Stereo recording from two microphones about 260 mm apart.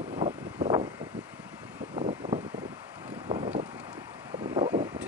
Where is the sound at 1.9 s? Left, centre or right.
Right.